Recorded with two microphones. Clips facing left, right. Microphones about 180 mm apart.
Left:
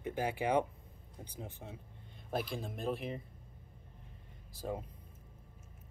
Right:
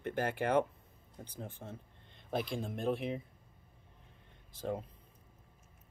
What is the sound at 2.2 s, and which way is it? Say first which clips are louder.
Speech: right 2 dB; 5° left (ahead or behind).